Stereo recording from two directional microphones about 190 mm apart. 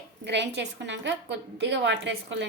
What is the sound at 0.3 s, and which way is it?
A woman's voice, 65° right (ahead or behind).